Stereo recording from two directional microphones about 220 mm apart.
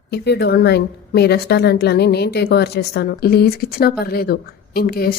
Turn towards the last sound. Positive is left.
turn(degrees=45)  # may be behind; listen again after turning